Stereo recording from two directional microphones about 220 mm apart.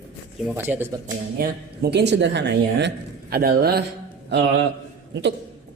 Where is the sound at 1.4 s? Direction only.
50° right (ahead or behind).